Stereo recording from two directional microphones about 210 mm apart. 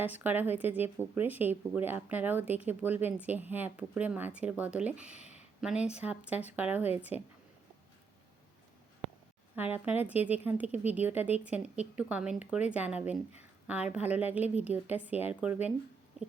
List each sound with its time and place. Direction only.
0.0 s speech: 10° right (ahead or behind)
5.2 s a sound: 30° left (ahead or behind)
5.5 s speech: 5° right (ahead or behind)
9.6 s speech: 10° right (ahead or behind)